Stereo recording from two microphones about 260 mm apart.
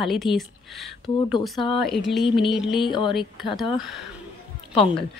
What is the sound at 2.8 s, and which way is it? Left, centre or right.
Speech, centre.